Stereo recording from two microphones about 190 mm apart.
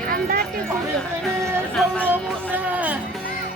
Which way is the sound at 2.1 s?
10° right (ahead or behind).